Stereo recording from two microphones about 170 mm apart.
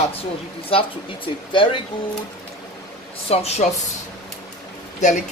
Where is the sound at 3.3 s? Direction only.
40° left (ahead or behind).